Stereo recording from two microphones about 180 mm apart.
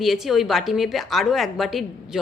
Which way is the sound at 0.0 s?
Centre (ahead or behind).